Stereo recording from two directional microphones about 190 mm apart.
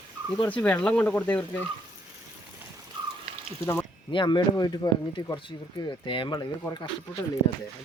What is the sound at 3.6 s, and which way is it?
Speech, 10° left (ahead or behind).